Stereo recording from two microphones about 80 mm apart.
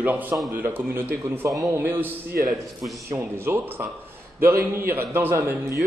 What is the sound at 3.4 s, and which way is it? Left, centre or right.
A man's voice, right.